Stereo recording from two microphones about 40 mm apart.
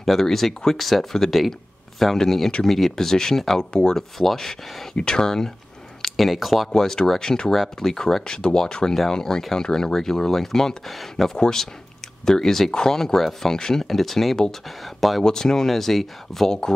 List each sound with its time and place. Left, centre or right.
0.0 s speech: centre
4.9 s speech: left
6.0 s speech: centre
6.7 s speech: centre
7.5 s speech: centre
7.9 s speech: centre
15.2 s speech: centre